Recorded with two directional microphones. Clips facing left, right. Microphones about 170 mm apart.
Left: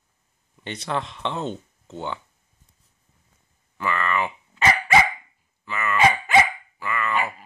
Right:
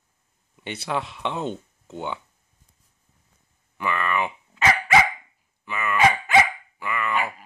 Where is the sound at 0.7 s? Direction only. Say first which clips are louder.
Even; 10° right (ahead or behind).